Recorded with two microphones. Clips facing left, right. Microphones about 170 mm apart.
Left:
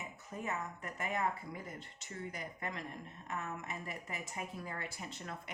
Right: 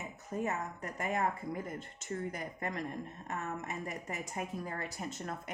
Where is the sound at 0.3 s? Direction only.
40° right (ahead or behind).